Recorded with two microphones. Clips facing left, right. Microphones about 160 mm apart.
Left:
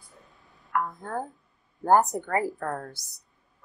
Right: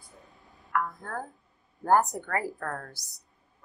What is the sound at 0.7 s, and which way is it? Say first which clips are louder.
A woman's voice: left 1 dB; 20° left (ahead or behind).